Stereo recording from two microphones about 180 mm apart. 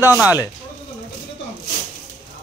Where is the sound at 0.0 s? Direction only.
10° right (ahead or behind).